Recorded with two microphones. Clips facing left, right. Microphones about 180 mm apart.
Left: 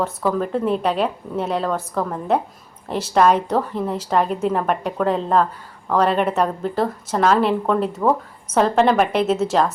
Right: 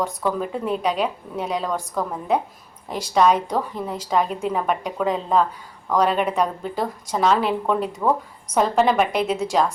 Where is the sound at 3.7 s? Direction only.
Centre (ahead or behind).